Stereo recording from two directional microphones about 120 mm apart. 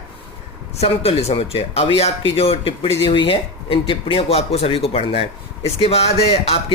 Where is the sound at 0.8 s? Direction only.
55° left (ahead or behind).